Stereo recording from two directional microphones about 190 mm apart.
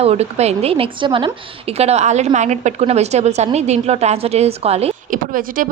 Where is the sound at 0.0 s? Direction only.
35° right (ahead or behind).